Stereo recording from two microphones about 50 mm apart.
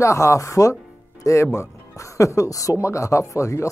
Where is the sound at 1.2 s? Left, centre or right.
Left.